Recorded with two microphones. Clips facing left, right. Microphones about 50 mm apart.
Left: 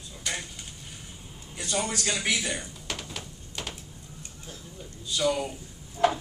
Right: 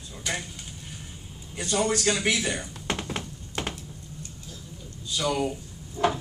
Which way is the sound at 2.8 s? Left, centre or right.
Right.